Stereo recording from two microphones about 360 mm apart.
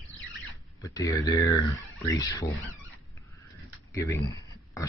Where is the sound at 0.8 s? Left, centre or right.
Centre.